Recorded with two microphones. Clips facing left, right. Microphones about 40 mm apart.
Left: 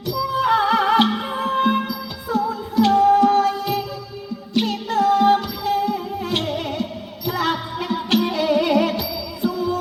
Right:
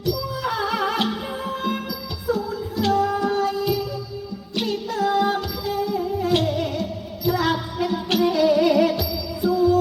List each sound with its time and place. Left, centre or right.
0.0 s music: left